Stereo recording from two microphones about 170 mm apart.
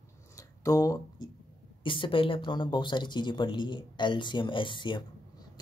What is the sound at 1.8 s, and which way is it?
Speech, 30° left (ahead or behind).